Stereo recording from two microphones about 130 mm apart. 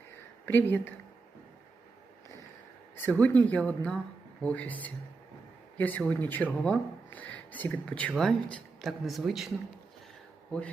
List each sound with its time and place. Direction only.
0.4 s speech: 15° left (ahead or behind)
2.9 s speech: 15° left (ahead or behind)